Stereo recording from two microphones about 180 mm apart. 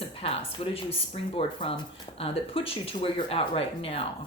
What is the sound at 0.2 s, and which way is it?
Speech, 30° left (ahead or behind).